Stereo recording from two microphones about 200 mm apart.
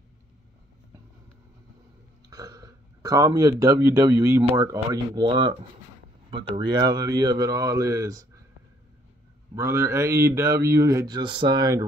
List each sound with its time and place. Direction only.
2.2 s speech: 20° right (ahead or behind)
9.6 s speech: 15° right (ahead or behind)